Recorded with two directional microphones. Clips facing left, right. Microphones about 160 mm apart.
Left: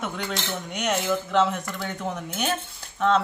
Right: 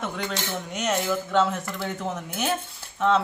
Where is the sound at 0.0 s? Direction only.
Centre (ahead or behind).